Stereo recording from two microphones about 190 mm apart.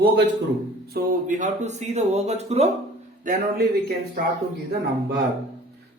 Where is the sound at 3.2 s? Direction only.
50° right (ahead or behind).